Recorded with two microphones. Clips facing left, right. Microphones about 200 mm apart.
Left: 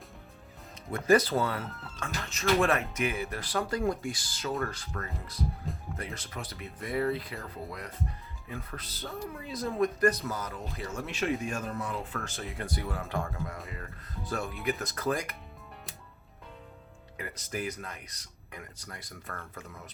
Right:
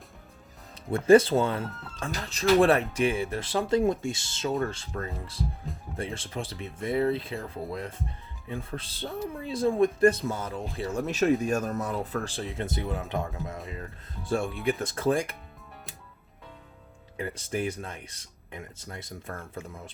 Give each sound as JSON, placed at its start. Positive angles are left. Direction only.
{"t": 0.9, "sound": "speech", "side_deg": -30}
{"t": 17.2, "sound": "speech", "side_deg": -30}